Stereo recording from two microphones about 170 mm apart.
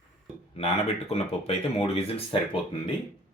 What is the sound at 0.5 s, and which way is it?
Speech, 40° left (ahead or behind).